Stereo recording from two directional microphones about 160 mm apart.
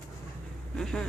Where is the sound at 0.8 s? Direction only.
5° left (ahead or behind).